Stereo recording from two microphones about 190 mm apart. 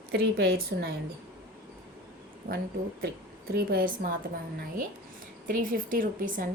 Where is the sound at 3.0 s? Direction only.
55° right (ahead or behind).